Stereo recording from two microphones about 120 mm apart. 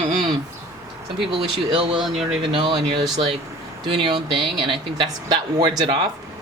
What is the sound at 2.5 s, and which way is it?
Speech, 45° right (ahead or behind).